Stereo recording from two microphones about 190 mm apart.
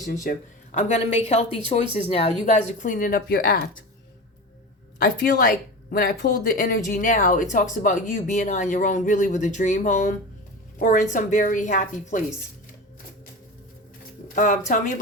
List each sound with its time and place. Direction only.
0.0 s speech: 45° left (ahead or behind)
5.0 s a woman's voice: 50° left (ahead or behind)
14.7 s speech: 45° left (ahead or behind)